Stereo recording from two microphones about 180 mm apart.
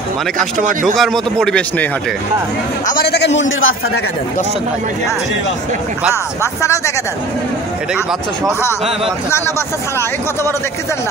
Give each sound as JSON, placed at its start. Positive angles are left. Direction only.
{"t": 0.4, "sound": "speech", "side_deg": -45}
{"t": 0.9, "sound": "a man's voice", "side_deg": 0}
{"t": 2.9, "sound": "a man's voice", "side_deg": 60}
{"t": 6.4, "sound": "speech", "side_deg": 15}